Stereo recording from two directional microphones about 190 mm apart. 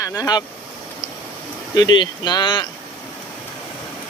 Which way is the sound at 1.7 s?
20° left (ahead or behind).